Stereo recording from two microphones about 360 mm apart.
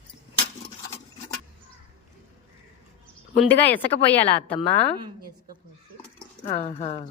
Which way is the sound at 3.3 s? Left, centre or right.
Centre.